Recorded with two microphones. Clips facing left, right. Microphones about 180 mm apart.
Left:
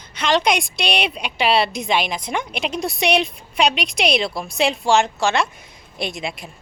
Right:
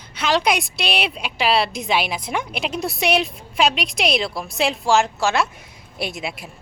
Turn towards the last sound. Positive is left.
turn(degrees=-5)  # may be behind; listen again after turning